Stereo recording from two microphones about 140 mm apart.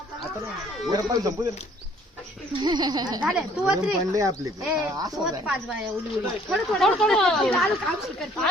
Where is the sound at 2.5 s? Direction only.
30° right (ahead or behind).